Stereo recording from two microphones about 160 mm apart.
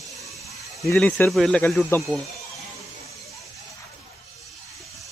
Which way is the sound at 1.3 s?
Centre (ahead or behind).